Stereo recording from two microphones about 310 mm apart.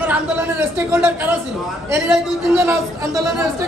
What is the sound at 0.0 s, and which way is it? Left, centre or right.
A man's voice, centre.